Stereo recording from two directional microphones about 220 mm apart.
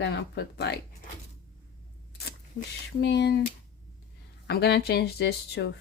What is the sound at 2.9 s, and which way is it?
Speech, 55° left (ahead or behind).